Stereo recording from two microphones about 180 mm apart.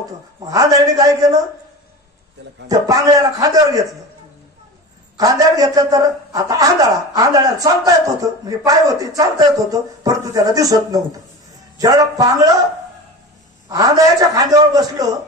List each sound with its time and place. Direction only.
0.5 s a man's voice: 20° right (ahead or behind)
2.7 s a man's voice: 20° right (ahead or behind)
5.1 s a man's voice: 20° right (ahead or behind)
13.7 s a man's voice: 20° right (ahead or behind)